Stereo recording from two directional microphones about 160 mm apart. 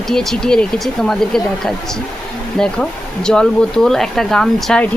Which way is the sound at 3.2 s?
5° left (ahead or behind).